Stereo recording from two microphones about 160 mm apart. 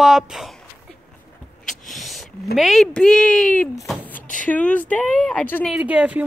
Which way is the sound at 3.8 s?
Centre (ahead or behind).